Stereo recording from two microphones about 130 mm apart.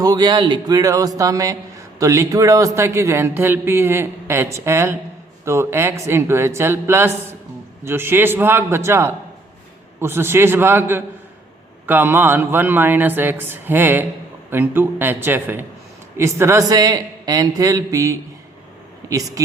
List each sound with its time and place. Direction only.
0.0 s speech: 30° right (ahead or behind)